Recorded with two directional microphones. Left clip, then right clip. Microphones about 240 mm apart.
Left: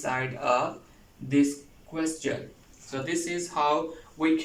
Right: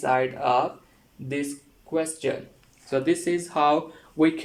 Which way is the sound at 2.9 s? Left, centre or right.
Right.